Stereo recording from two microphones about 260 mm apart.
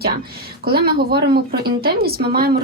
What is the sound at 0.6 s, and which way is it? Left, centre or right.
A woman's voice, right.